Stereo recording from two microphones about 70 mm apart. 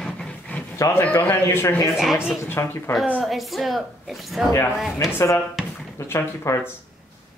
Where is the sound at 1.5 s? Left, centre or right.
Left.